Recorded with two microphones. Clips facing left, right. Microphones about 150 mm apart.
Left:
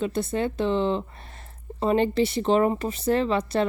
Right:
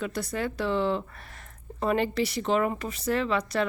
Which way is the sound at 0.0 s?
25° left (ahead or behind).